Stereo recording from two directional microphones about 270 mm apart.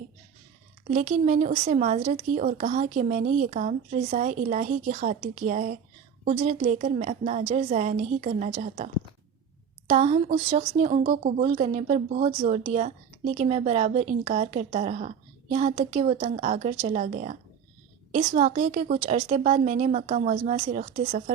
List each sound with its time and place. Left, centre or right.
0.9 s speech: right